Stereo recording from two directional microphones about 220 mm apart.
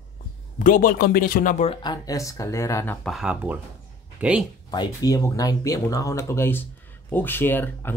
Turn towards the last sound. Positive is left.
turn(degrees=10)  # may be behind; listen again after turning